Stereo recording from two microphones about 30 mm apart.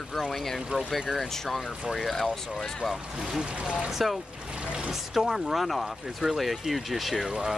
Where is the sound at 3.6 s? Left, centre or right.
Right.